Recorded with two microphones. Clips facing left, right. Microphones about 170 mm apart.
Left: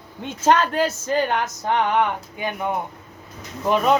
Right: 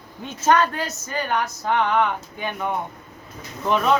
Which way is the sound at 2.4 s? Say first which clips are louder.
Left 2 dB; 10° left (ahead or behind).